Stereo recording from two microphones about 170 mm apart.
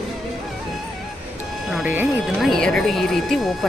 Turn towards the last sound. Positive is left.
turn(degrees=0)  # may be behind; listen again after turning